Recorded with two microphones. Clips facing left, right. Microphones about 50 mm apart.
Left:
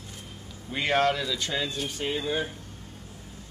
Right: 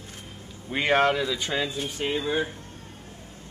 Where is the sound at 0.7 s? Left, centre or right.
Centre.